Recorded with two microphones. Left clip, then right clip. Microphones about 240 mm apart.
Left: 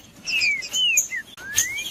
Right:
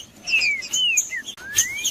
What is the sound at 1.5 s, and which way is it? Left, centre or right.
Chirp, centre.